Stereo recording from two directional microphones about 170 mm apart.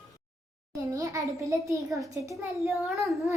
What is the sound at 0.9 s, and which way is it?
A child's voice, 20° right (ahead or behind).